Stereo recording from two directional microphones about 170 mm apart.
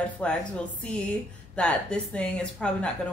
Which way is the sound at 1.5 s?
5° left (ahead or behind).